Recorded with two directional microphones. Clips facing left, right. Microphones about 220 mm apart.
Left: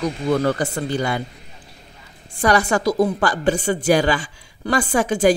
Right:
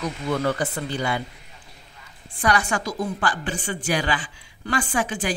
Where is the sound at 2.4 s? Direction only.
40° left (ahead or behind).